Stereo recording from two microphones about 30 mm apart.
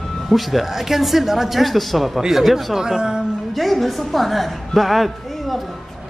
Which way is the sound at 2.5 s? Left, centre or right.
Centre.